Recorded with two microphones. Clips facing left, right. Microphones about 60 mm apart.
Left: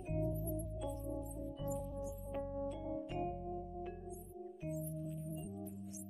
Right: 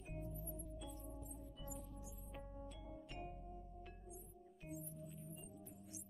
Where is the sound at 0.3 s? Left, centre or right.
Centre.